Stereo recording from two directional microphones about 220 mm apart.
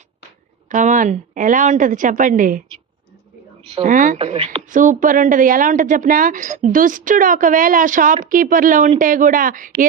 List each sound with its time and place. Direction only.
0.7 s speech: 35° right (ahead or behind)
3.7 s speech: 30° right (ahead or behind)